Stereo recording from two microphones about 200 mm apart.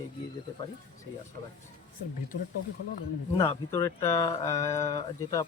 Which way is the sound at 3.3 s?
15° left (ahead or behind).